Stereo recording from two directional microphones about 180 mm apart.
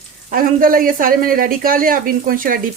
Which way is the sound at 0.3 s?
50° right (ahead or behind).